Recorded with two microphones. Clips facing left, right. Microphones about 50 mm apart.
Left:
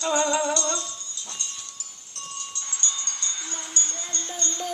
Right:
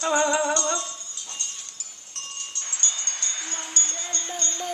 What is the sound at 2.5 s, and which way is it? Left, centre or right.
Wind chime, right.